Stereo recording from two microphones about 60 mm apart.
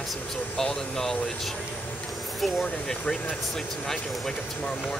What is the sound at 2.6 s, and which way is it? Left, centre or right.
Speech, centre.